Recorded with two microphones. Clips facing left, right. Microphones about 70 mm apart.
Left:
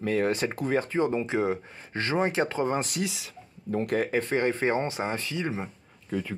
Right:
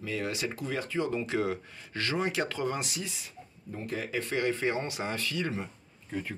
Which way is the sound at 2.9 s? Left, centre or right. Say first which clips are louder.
Left 7 dB; left.